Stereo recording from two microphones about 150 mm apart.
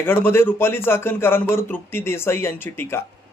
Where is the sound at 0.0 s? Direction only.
15° left (ahead or behind).